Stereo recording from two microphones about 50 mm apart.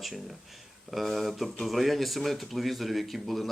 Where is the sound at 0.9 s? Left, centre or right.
Centre.